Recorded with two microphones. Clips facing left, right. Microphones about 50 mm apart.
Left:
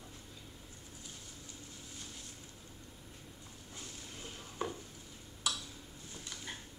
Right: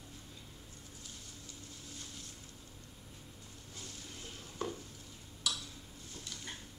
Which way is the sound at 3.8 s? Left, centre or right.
Centre.